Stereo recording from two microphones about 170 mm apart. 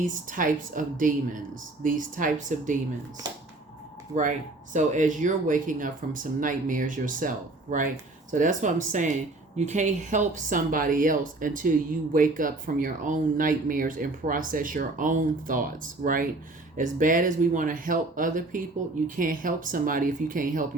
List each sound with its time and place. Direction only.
0.0 s speech: 50° right (ahead or behind)
4.1 s speech: 45° right (ahead or behind)